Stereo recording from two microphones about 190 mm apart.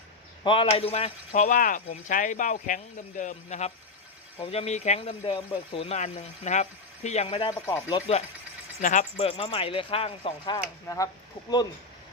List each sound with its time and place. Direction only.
0.4 s speech: 25° left (ahead or behind)
8.8 s speech: 40° left (ahead or behind); by 11.6 s 20° left (ahead or behind)